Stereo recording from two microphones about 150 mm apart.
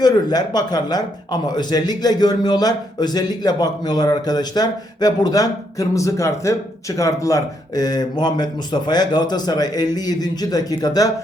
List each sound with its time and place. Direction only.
0.0 s a man's voice: 25° left (ahead or behind)